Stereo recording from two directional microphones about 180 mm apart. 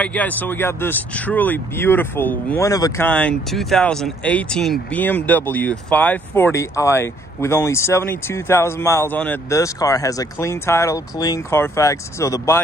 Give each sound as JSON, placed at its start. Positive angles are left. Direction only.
{"t": 0.0, "sound": "speech", "side_deg": 10}
{"t": 3.1, "sound": "speech", "side_deg": 5}